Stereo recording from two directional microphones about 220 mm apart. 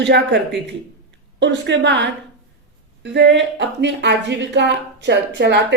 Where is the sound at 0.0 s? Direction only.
50° right (ahead or behind).